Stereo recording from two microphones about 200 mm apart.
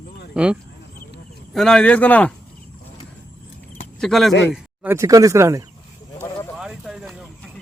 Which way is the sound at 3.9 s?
Centre (ahead or behind).